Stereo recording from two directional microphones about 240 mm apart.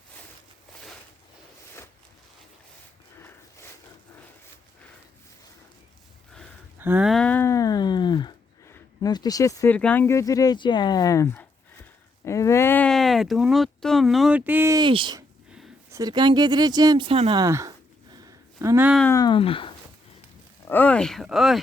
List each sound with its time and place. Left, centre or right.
6.7 s a sound: centre
15.9 s speech: centre
19.0 s speech: centre
20.7 s speech: centre